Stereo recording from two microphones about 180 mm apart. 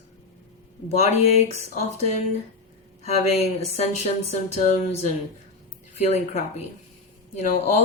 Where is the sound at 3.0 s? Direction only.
35° left (ahead or behind).